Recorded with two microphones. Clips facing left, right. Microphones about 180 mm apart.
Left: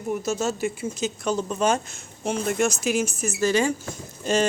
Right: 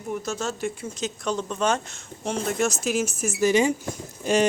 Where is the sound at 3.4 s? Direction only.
20° right (ahead or behind).